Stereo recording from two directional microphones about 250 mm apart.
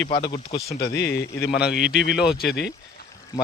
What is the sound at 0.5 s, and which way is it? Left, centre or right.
Speech, left.